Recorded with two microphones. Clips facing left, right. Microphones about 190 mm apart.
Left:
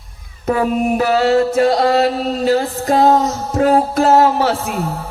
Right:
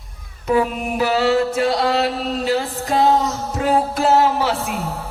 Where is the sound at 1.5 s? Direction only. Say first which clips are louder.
Left 5 dB; 45° left (ahead or behind).